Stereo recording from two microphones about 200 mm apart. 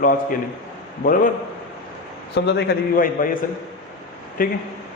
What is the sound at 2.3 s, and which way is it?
Speech, 60° left (ahead or behind).